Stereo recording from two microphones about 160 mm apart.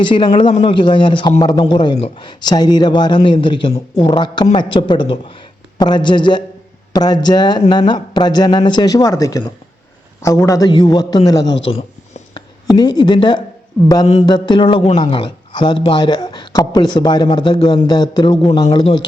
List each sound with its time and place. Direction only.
0.0 s a man's voice: 30° left (ahead or behind)